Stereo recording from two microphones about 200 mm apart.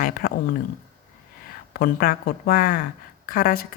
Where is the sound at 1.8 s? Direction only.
50° left (ahead or behind).